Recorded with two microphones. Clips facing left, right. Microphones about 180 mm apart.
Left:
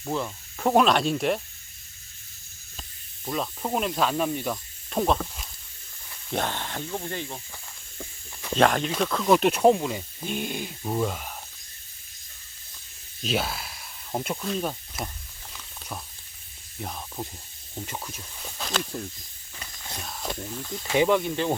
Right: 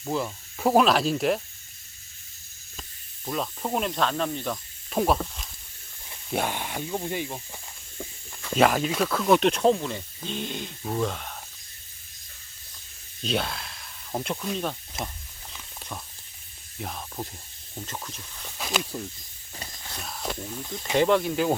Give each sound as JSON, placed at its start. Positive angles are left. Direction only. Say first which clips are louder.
{"t": 0.0, "sound": "speech", "louder": "right 1 dB", "side_deg": -5}
{"t": 3.2, "sound": "speech", "louder": "even", "side_deg": 0}
{"t": 4.9, "sound": "speech", "louder": "right 1 dB", "side_deg": -5}
{"t": 8.5, "sound": "speech", "louder": "even", "side_deg": -5}
{"t": 13.2, "sound": "a sound", "louder": "even", "side_deg": 5}
{"t": 15.0, "sound": "speech", "louder": "even", "side_deg": -25}
{"t": 16.8, "sound": "speech", "louder": "even", "side_deg": 0}
{"t": 17.7, "sound": "speech", "louder": "left 1 dB", "side_deg": 10}
{"t": 18.5, "sound": "speech", "louder": "right 1 dB", "side_deg": -5}